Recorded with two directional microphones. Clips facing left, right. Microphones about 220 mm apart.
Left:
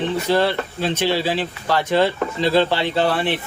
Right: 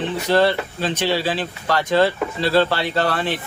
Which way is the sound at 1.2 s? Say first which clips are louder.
Left 1 dB; 15° left (ahead or behind).